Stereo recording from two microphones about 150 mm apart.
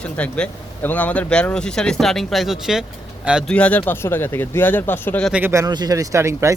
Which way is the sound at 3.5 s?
10° left (ahead or behind).